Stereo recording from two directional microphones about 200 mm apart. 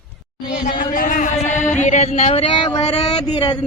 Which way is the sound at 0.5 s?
40° left (ahead or behind).